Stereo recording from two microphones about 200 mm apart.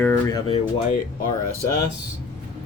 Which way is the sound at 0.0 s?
10° left (ahead or behind).